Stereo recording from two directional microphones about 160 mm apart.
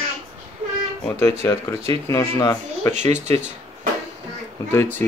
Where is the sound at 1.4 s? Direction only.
20° left (ahead or behind).